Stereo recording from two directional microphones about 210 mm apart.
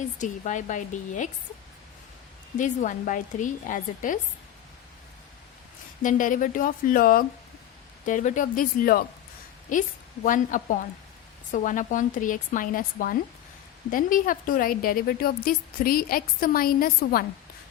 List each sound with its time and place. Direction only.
0.2 s speech: 35° left (ahead or behind)
2.6 s speech: 35° left (ahead or behind)
6.0 s speech: 40° left (ahead or behind)
10.2 s a woman's voice: 40° left (ahead or behind)